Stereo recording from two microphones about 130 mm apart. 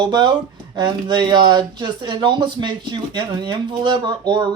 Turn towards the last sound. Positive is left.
turn(degrees=-35)  # may be behind; listen again after turning